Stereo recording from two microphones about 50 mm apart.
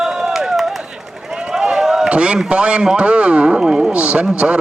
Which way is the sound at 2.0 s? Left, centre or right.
Right.